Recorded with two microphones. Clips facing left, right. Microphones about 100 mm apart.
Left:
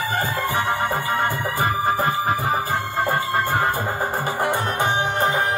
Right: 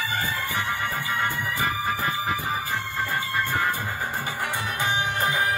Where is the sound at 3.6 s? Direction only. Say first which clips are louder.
Left 5 dB; 40° left (ahead or behind).